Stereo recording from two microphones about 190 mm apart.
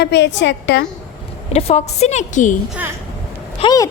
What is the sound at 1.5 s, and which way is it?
A woman's voice, 35° left (ahead or behind).